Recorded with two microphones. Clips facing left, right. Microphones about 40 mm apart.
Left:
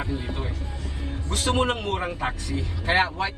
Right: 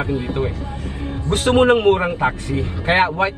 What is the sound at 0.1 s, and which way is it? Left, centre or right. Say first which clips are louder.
A man's voice: right 9 dB; right.